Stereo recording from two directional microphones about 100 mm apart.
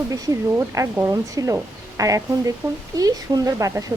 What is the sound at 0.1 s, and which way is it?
Speech, 35° right (ahead or behind).